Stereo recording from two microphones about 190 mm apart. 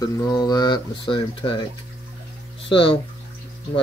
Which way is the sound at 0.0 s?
20° left (ahead or behind).